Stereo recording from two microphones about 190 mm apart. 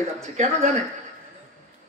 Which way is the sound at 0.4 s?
35° right (ahead or behind).